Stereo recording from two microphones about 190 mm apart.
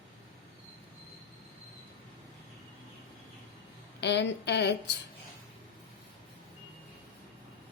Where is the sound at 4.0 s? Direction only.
65° left (ahead or behind).